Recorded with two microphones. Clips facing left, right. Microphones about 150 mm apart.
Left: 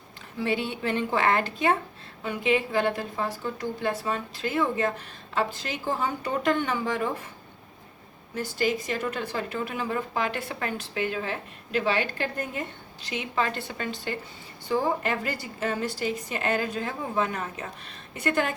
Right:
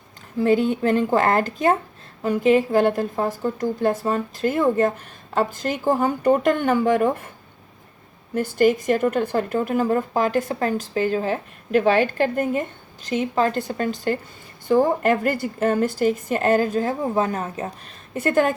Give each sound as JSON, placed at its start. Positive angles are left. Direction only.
{"t": 0.3, "sound": "a woman's voice", "side_deg": -45}
{"t": 8.4, "sound": "a woman's voice", "side_deg": -50}